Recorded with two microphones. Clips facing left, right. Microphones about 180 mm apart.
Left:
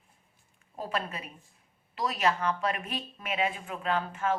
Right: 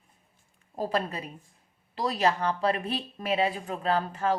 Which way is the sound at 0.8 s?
35° right (ahead or behind).